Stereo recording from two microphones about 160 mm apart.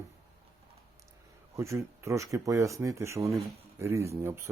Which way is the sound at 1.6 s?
20° right (ahead or behind).